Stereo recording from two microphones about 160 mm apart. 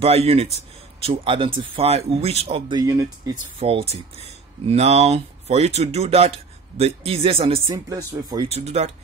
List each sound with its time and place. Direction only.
0.0 s speech: 40° right (ahead or behind)
2.7 s speech: 20° right (ahead or behind)
3.5 s speech: 35° right (ahead or behind)
7.6 s speech: 20° right (ahead or behind)
8.5 s speech: 40° right (ahead or behind)